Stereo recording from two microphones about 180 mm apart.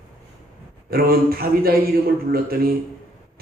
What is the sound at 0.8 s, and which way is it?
A man's voice, 55° right (ahead or behind).